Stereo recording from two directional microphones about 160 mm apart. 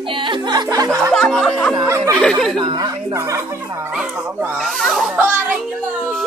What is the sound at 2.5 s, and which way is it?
Speech, 25° right (ahead or behind).